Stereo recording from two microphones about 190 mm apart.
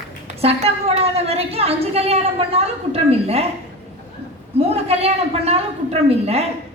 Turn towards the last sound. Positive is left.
turn(degrees=-30)  # may be behind; listen again after turning